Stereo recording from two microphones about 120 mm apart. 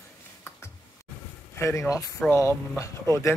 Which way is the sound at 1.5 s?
25° left (ahead or behind).